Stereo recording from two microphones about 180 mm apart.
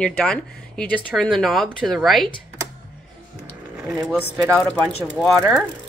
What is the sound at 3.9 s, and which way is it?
Speech, centre (ahead or behind).